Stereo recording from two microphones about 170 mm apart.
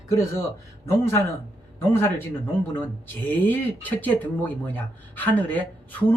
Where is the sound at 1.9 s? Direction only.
15° left (ahead or behind).